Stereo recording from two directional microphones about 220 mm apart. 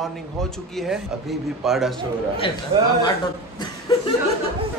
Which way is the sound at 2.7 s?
25° right (ahead or behind).